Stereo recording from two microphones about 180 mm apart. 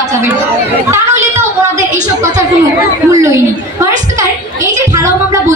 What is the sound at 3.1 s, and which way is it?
Speech, 15° right (ahead or behind).